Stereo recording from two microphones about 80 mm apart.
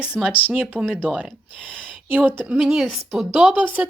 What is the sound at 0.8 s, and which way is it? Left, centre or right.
Speech, centre.